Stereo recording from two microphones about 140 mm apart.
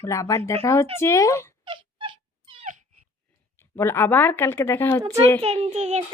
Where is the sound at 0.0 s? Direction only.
20° left (ahead or behind).